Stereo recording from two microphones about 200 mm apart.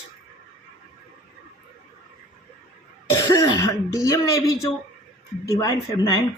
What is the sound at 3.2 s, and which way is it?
Speech, 20° left (ahead or behind).